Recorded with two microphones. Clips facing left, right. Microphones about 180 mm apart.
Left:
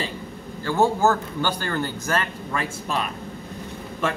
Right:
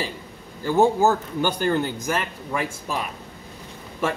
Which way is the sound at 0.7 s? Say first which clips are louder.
Right 2 dB; 15° right (ahead or behind).